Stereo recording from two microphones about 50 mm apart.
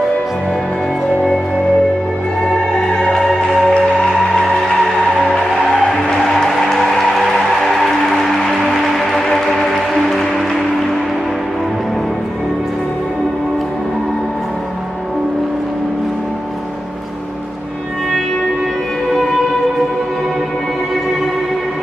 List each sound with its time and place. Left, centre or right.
2.8 s music: centre
3.6 s music: centre
4.4 s music: centre